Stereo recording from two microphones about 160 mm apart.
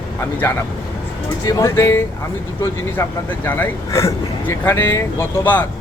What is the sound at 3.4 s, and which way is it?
Speech, 10° left (ahead or behind).